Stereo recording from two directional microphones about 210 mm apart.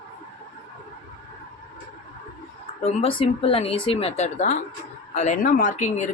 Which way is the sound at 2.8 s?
25° left (ahead or behind).